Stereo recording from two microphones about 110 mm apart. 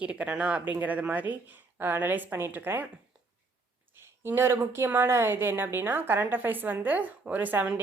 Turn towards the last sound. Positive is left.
turn(degrees=-15)  # may be behind; listen again after turning